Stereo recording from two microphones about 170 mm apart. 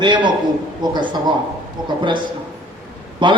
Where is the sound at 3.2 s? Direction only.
25° right (ahead or behind).